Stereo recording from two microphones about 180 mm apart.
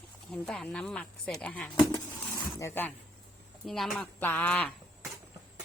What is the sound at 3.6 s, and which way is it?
A woman's voice, centre (ahead or behind).